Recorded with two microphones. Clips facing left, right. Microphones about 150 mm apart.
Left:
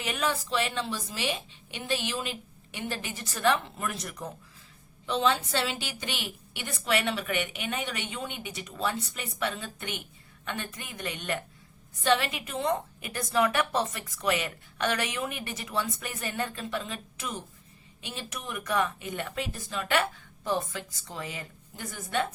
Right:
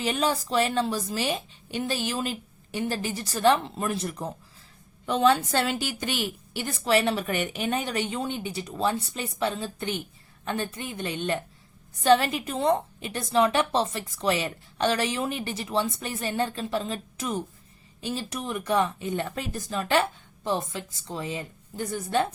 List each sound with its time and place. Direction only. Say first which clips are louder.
0.0 s a woman's voice: right 5 dB; 30° right (ahead or behind)
5.0 s a woman's voice: right 5 dB; 50° right (ahead or behind); by 11.3 s 30° right (ahead or behind)
12.0 s a woman's voice: right 6 dB; 40° right (ahead or behind)